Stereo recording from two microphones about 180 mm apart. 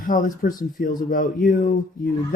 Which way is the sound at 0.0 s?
50° left (ahead or behind).